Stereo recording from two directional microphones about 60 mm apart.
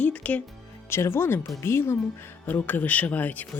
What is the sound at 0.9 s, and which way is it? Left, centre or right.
Speech, left.